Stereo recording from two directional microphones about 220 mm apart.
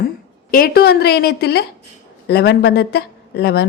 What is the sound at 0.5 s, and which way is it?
A woman's voice, 45° left (ahead or behind).